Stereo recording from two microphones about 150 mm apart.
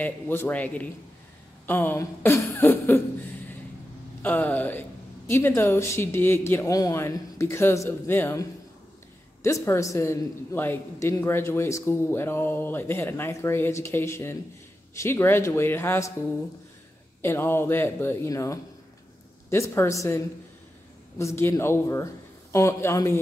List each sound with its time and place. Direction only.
0.0 s a man's voice: 15° left (ahead or behind)
17.2 s a man's voice: 15° left (ahead or behind)